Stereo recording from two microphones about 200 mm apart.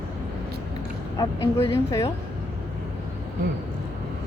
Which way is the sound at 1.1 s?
15° left (ahead or behind).